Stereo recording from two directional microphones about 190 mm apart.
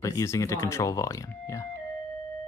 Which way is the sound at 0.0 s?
15° left (ahead or behind).